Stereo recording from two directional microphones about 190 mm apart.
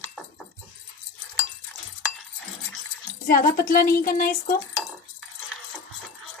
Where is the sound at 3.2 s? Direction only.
50° left (ahead or behind).